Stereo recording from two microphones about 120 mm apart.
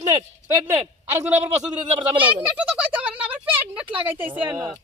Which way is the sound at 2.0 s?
45° right (ahead or behind).